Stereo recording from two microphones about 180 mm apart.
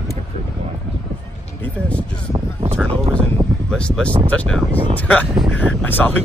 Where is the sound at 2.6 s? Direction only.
30° right (ahead or behind).